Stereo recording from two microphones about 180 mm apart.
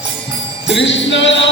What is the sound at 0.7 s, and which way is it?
Music, 85° left.